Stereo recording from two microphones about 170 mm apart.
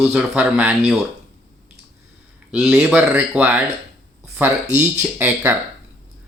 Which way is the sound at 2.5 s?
10° right (ahead or behind).